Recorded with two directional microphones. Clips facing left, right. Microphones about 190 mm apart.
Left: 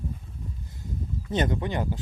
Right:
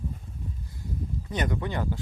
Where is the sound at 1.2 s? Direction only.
25° left (ahead or behind).